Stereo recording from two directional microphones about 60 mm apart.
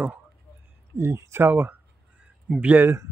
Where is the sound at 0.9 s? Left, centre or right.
Right.